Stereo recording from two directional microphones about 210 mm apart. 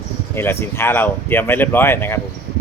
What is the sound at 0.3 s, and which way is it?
Speech, 10° left (ahead or behind).